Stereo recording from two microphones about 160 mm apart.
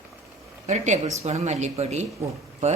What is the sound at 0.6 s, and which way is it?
Speech, 45° right (ahead or behind).